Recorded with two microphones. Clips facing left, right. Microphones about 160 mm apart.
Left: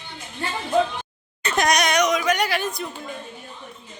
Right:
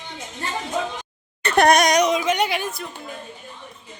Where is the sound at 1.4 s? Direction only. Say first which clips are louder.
Right 5 dB; 60° right (ahead or behind); by 2.6 s 20° right (ahead or behind).